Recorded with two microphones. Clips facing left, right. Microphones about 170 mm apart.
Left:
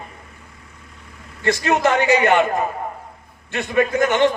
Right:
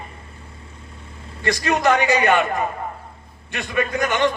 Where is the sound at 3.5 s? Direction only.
20° left (ahead or behind).